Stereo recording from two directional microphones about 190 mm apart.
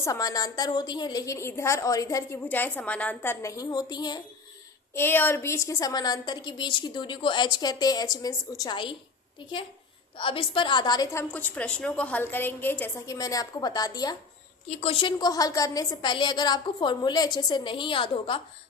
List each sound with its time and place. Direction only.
0.0 s a woman's voice: 20° left (ahead or behind)
4.9 s a woman's voice: 10° left (ahead or behind)
10.2 s a woman's voice: 30° left (ahead or behind)
14.7 s a woman's voice: 35° left (ahead or behind)